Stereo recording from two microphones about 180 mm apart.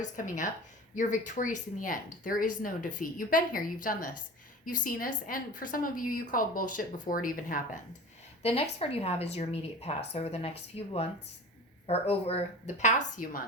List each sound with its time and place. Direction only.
0.0 s a woman's voice: 45° left (ahead or behind)
8.4 s speech: 35° left (ahead or behind)